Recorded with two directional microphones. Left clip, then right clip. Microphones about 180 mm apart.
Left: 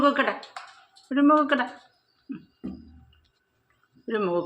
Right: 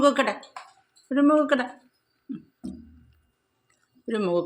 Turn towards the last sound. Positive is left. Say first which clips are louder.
# right 1 dB
turn(degrees=-25)  # may be behind; listen again after turning